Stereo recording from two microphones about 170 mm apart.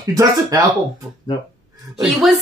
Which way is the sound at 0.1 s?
20° right (ahead or behind).